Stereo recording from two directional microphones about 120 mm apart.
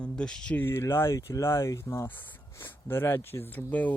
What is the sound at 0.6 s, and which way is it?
Speech, 20° left (ahead or behind).